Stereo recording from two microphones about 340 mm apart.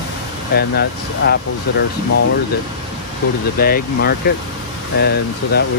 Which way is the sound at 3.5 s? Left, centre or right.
Left.